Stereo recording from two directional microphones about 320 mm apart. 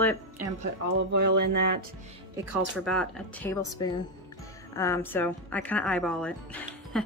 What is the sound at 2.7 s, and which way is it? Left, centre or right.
A woman's voice, centre.